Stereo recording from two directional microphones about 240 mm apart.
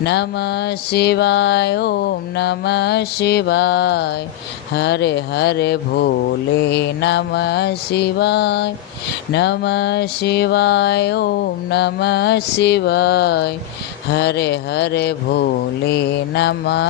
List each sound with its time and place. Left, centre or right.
0.0 s mantra: left